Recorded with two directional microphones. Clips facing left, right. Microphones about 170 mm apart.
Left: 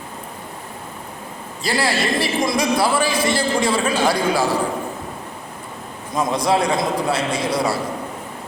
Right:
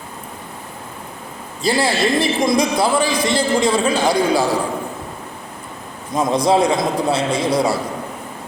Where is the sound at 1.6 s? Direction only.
20° right (ahead or behind).